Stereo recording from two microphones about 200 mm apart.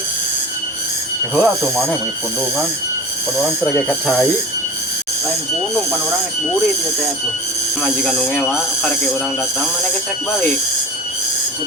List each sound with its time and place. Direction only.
1.4 s speech: 5° left (ahead or behind)
3.4 s speech: centre (ahead or behind)
7.8 s speech: centre (ahead or behind)